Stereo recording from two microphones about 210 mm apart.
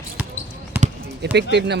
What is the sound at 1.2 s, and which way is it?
Speech, 55° right (ahead or behind).